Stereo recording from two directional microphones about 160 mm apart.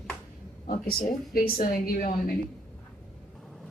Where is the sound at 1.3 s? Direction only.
65° left (ahead or behind).